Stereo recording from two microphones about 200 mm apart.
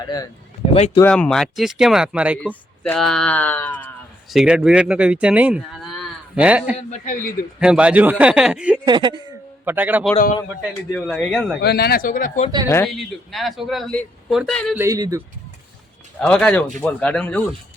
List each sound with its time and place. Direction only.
0.0 s speech: 20° left (ahead or behind)
1.0 s a man's voice: 5° left (ahead or behind)
2.4 s speech: 5° left (ahead or behind)
4.4 s speech: 5° right (ahead or behind)
6.7 s a man's voice: 35° left (ahead or behind)
7.6 s a man's voice: 5° right (ahead or behind)
8.8 s speech: 20° right (ahead or behind)
9.6 s a man's voice: 10° right (ahead or behind)
10.9 s a man's voice: 5° left (ahead or behind)
11.6 s speech: 50° left (ahead or behind)
12.6 s speech: 10° left (ahead or behind)
12.9 s a man's voice: centre (ahead or behind)
14.8 s a man's voice: 15° right (ahead or behind)
16.2 s a man's voice: 5° left (ahead or behind)